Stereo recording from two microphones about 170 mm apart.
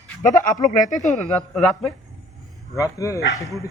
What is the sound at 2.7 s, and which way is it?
Speech, 20° left (ahead or behind).